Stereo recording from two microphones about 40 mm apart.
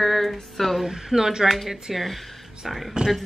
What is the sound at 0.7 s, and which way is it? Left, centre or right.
Speech, centre.